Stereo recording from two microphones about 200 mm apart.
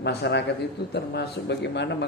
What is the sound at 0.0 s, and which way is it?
Speech, 55° left (ahead or behind).